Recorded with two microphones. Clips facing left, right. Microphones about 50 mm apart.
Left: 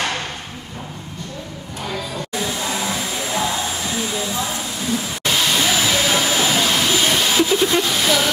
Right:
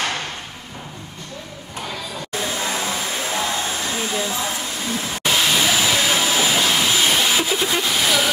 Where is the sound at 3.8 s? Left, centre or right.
Right.